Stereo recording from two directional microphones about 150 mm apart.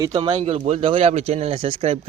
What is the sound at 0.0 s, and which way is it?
Speech, 30° right (ahead or behind).